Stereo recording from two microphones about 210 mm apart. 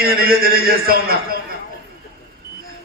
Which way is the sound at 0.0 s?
45° right (ahead or behind).